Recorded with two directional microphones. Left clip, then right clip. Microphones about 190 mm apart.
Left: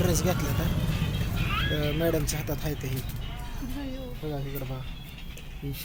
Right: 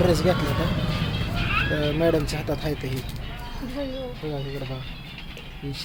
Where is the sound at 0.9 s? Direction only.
50° right (ahead or behind).